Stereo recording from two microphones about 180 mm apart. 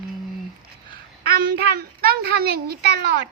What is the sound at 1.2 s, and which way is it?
A child's voice, 60° right (ahead or behind).